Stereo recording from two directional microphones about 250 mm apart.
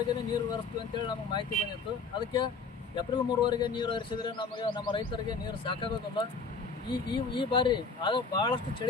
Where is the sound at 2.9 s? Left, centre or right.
Centre.